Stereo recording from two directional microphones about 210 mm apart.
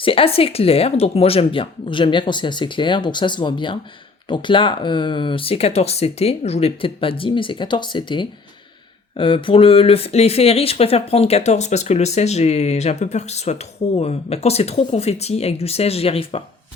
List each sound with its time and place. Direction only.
0.0 s speech: 25° left (ahead or behind)